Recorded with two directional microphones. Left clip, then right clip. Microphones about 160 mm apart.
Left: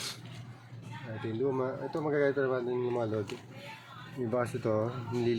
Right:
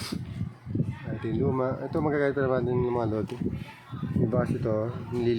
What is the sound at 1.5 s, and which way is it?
Speech, 30° right (ahead or behind).